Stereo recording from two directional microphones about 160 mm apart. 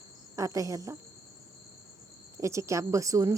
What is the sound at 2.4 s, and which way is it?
Speech, 20° right (ahead or behind).